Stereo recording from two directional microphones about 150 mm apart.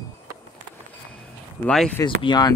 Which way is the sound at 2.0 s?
30° left (ahead or behind).